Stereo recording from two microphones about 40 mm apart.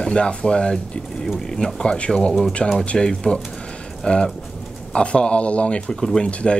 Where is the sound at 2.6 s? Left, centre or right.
Centre.